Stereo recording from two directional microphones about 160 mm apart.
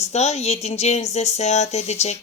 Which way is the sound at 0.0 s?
45° left (ahead or behind).